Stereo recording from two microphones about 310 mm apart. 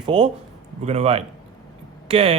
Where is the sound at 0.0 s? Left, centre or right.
Centre.